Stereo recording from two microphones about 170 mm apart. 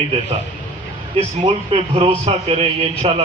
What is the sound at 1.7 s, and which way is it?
A man's voice, 30° right (ahead or behind).